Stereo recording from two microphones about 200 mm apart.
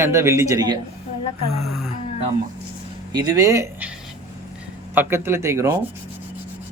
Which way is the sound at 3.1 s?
20° right (ahead or behind).